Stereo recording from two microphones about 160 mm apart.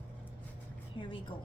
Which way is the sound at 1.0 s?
30° left (ahead or behind).